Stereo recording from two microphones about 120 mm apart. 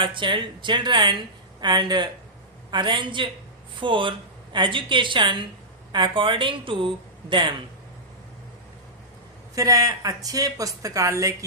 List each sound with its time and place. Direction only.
0.0 s speech: 45° right (ahead or behind)
9.6 s speech: 30° right (ahead or behind)